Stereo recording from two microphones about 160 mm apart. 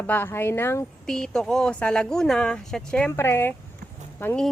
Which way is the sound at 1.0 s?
5° left (ahead or behind).